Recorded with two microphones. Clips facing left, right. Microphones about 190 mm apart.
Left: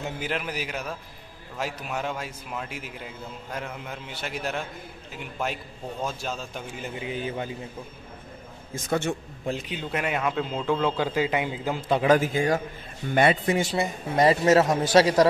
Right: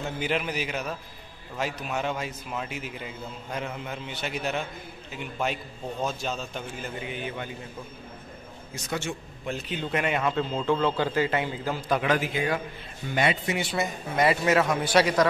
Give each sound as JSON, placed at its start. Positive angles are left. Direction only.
{"t": 0.2, "sound": "a man's voice", "side_deg": 0}
{"t": 7.1, "sound": "a man's voice", "side_deg": 35}
{"t": 8.7, "sound": "speech", "side_deg": 50}
{"t": 9.7, "sound": "a man's voice", "side_deg": 5}
{"t": 12.1, "sound": "speech", "side_deg": 45}
{"t": 13.7, "sound": "a man's voice", "side_deg": 30}